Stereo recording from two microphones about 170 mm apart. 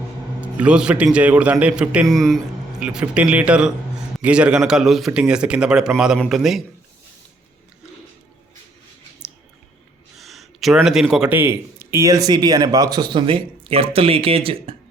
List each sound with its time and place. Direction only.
0.4 s a man's voice: 5° right (ahead or behind)
10.2 s a sound: centre (ahead or behind)
10.8 s speech: centre (ahead or behind); by 14.8 s 35° right (ahead or behind)